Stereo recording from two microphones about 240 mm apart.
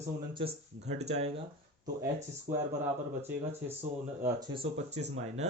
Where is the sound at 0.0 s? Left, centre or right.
Right.